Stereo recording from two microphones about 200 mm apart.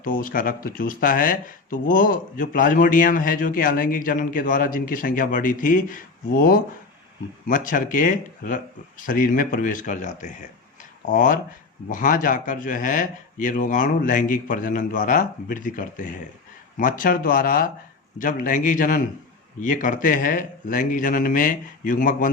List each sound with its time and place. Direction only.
0.0 s a man's voice: 45° left (ahead or behind)